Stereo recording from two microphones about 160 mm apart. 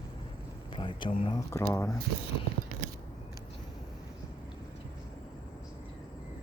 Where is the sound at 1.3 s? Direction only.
20° left (ahead or behind).